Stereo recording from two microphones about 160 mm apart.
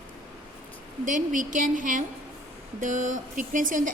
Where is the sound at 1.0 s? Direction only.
55° right (ahead or behind).